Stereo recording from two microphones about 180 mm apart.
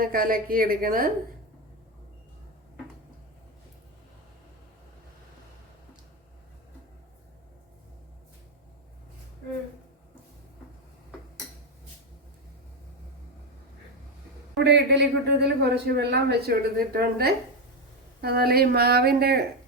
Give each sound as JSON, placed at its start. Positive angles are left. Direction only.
{"t": 0.0, "sound": "a woman's voice", "side_deg": -50}
{"t": 14.6, "sound": "speech", "side_deg": -70}